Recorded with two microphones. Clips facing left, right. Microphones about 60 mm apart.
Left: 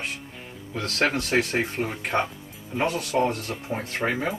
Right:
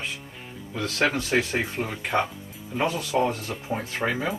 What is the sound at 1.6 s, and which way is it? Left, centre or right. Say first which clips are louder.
Speech: left 2 dB; centre.